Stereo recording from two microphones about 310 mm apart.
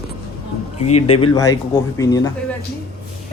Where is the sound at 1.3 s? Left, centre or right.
Centre.